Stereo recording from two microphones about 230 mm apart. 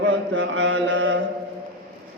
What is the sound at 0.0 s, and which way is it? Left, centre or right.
Mantra, right.